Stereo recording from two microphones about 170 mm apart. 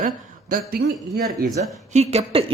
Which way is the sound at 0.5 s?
60° right (ahead or behind).